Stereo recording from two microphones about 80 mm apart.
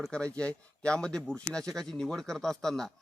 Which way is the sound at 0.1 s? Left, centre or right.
Centre.